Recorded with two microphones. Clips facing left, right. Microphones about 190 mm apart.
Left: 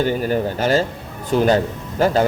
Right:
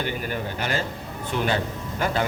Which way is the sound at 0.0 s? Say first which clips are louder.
Left 10 dB; 40° left (ahead or behind).